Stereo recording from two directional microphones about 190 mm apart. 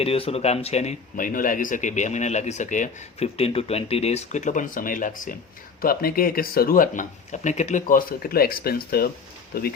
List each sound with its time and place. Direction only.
0.0 s speech: 30° left (ahead or behind); by 9.7 s 50° left (ahead or behind)